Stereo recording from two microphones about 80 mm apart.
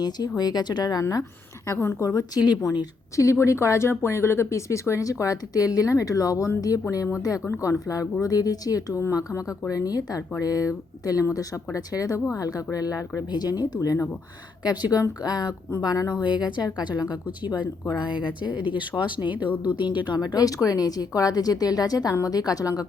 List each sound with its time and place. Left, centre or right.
0.0 s speech: left
1.6 s speech: left
3.2 s a woman's voice: left
14.6 s speech: left
16.2 s speech: left
18.5 s speech: centre
18.8 s speech: left
20.1 s speech: left